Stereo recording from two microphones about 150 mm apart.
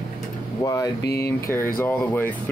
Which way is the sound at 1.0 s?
90° left.